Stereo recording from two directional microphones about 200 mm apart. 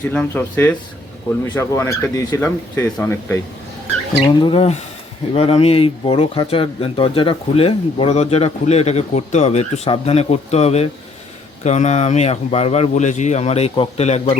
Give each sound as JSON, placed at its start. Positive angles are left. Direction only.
{"t": 0.1, "sound": "speech", "side_deg": 10}
{"t": 4.2, "sound": "speech", "side_deg": 25}